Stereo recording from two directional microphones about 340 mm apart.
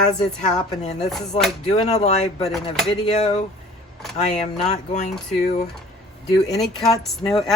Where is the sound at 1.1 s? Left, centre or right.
Centre.